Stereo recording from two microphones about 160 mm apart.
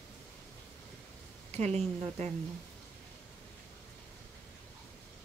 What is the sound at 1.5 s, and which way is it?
Speech, 45° right (ahead or behind).